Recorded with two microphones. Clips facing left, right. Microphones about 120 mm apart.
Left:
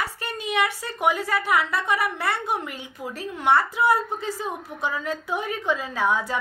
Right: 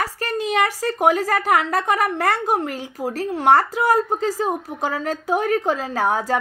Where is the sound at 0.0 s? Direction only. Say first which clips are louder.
Right 6 dB; 40° right (ahead or behind).